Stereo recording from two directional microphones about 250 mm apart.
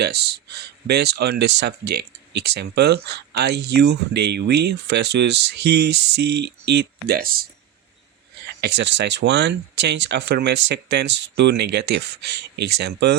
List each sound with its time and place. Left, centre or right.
0.0 s speech: right
8.6 s speech: right